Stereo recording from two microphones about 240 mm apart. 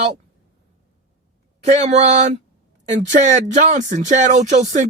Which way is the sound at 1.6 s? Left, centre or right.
Right.